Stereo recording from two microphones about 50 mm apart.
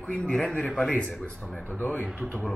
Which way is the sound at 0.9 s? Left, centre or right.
Left.